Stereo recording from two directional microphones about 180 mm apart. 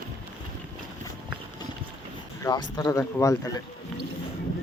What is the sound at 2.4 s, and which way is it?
Speech, 20° left (ahead or behind).